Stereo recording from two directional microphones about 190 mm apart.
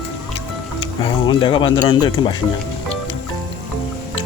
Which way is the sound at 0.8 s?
25° left (ahead or behind).